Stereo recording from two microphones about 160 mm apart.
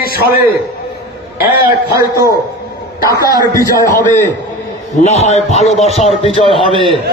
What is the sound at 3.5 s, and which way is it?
Speech, 20° left (ahead or behind).